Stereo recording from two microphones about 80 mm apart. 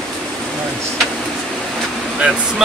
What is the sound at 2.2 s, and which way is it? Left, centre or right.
Speech, centre.